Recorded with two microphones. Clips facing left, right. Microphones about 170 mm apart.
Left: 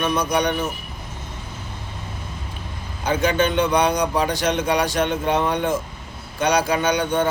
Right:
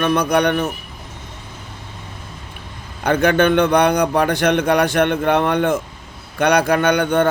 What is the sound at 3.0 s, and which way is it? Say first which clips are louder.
A man's voice: right 5 dB; 60° right (ahead or behind).